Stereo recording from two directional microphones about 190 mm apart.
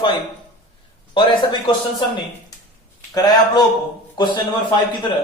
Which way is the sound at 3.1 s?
20° left (ahead or behind).